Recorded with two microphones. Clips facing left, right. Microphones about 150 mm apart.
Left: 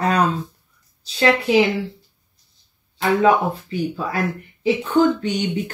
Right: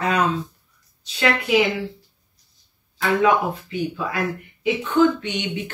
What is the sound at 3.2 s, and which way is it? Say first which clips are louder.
Speech: left 2 dB; 35° left (ahead or behind).